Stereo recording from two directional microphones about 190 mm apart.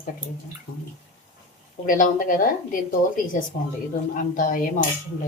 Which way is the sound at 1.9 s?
45° left (ahead or behind).